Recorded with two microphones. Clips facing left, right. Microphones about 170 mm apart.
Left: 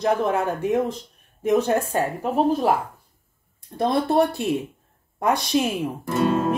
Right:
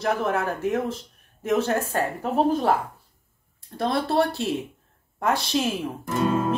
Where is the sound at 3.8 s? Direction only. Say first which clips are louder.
Left 3 dB; 20° left (ahead or behind).